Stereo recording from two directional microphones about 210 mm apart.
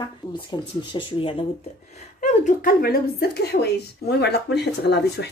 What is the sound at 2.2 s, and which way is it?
A woman's voice, 40° left (ahead or behind).